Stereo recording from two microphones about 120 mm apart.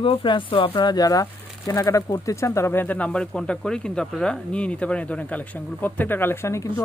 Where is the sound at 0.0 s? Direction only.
45° left (ahead or behind).